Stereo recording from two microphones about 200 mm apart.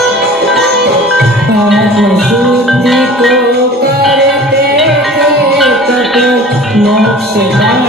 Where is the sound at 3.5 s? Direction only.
50° right (ahead or behind).